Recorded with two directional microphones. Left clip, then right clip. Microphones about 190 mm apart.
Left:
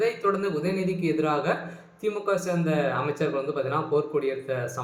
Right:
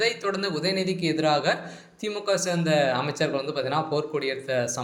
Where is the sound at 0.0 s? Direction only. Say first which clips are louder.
Left 1 dB; 30° right (ahead or behind).